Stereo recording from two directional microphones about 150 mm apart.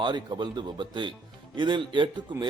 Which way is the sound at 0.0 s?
30° right (ahead or behind).